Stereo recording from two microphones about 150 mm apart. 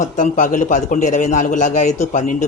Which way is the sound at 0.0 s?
60° left (ahead or behind).